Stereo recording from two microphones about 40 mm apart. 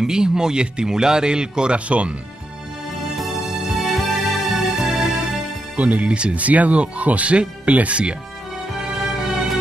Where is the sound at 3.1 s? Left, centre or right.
Centre.